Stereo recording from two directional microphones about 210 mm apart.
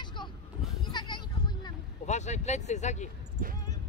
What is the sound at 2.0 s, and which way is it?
Speech, 35° left (ahead or behind).